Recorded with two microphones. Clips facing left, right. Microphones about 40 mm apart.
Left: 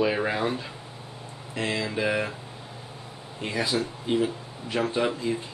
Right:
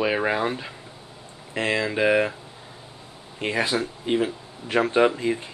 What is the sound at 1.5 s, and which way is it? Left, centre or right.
Speech, right.